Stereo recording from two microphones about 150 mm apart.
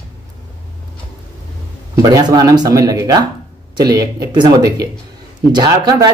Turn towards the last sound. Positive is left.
turn(degrees=-25)  # may be behind; listen again after turning